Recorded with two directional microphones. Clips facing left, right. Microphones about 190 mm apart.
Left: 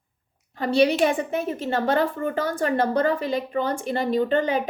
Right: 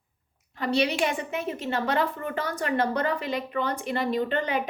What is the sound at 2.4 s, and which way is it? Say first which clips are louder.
A woman's voice: left 2 dB; 45° left (ahead or behind).